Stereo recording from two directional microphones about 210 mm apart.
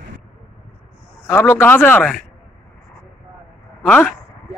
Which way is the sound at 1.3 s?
10° left (ahead or behind).